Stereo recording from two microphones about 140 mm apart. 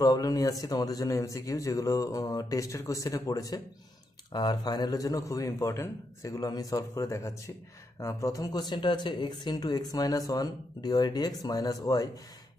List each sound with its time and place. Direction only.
0.0 s speech: 25° left (ahead or behind)